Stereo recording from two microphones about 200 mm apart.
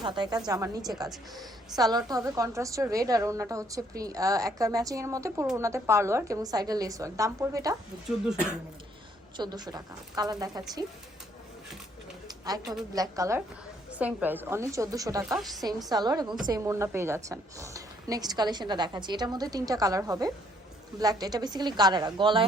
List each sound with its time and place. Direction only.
0.0 s a woman's voice: 20° right (ahead or behind)
9.4 s a woman's voice: 20° right (ahead or behind)
12.9 s a woman's voice: 15° right (ahead or behind)
15.4 s a woman's voice: centre (ahead or behind)
15.9 s a woman's voice: 20° right (ahead or behind)